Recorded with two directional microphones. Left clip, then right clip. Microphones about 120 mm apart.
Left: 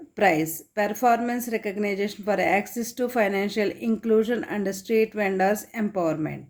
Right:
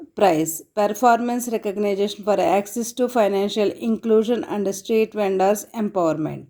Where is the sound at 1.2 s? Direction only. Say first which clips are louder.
Right 3 dB; 40° right (ahead or behind).